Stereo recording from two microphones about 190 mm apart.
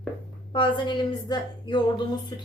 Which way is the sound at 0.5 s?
25° left (ahead or behind).